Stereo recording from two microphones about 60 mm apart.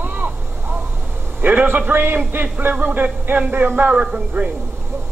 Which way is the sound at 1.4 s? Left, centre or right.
Right.